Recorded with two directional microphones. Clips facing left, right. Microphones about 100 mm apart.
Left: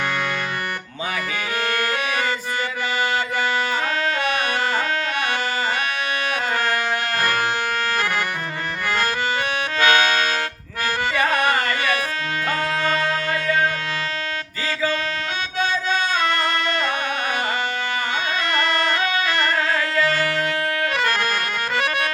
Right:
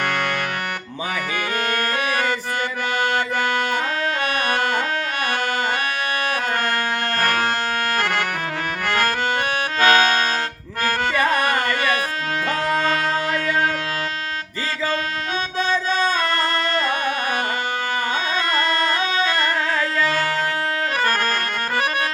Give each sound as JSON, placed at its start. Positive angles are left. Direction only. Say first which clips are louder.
{"t": 7.2, "sound": "music", "louder": "right 2 dB", "side_deg": -55}
{"t": 7.9, "sound": "accordion", "louder": "right 1 dB", "side_deg": -55}
{"t": 9.8, "sound": "music", "louder": "right 2 dB", "side_deg": -40}
{"t": 12.8, "sound": "music", "louder": "right 1 dB", "side_deg": -45}
{"t": 16.0, "sound": "music", "louder": "right 1 dB", "side_deg": -40}
{"t": 18.5, "sound": "music", "louder": "even", "side_deg": -30}